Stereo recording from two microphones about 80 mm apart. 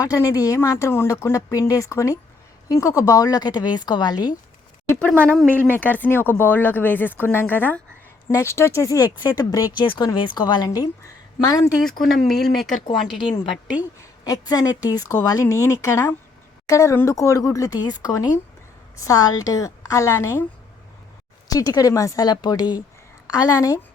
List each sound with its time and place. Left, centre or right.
0.3 s speech: left
4.9 s speech: centre
5.5 s speech: right
5.7 s speech: left
8.3 s speech: left
9.7 s speech: left
11.8 s speech: centre
13.1 s a woman's voice: left
14.0 s a woman's voice: left
17.7 s speech: left
21.4 s speech: left
22.3 s speech: left
23.2 s a woman's voice: left